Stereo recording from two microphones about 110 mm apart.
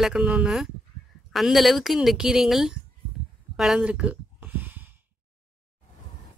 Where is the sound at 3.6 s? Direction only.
5° right (ahead or behind).